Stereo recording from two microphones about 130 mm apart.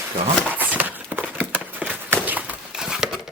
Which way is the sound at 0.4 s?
15° right (ahead or behind).